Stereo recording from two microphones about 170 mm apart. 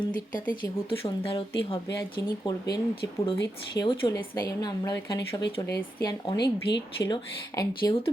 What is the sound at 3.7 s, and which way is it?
Speech, 25° left (ahead or behind).